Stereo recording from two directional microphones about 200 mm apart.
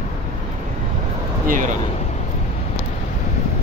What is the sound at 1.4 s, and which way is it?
Speech, 40° right (ahead or behind).